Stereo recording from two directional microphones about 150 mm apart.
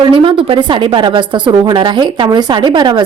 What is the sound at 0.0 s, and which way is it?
A woman's voice, 35° right (ahead or behind).